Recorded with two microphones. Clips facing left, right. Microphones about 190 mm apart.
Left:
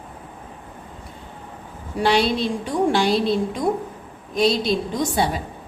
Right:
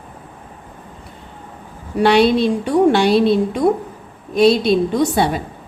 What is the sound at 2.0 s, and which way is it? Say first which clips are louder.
A woman's voice: right 6 dB; 60° right (ahead or behind).